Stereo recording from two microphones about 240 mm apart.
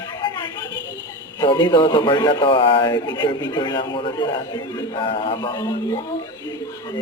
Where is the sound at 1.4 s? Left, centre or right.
Centre.